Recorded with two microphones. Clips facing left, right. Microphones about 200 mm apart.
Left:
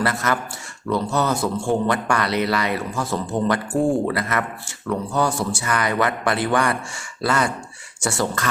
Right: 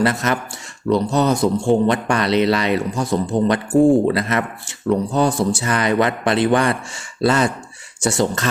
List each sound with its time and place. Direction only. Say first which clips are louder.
0.0 s a man's voice: right 4 dB; 20° right (ahead or behind)